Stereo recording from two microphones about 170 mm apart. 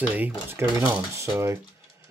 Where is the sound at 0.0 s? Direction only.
10° right (ahead or behind).